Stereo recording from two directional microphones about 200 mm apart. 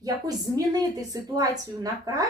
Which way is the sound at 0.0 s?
20° right (ahead or behind).